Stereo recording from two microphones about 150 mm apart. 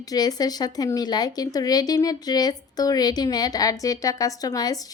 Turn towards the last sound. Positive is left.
turn(degrees=25)  # may be behind; listen again after turning